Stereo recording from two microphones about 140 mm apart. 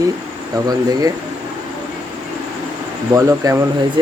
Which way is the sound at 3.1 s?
25° right (ahead or behind).